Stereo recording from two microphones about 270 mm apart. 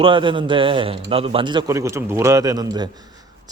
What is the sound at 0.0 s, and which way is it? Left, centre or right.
A man's voice, centre.